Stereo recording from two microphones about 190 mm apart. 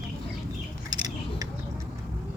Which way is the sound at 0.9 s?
20° right (ahead or behind).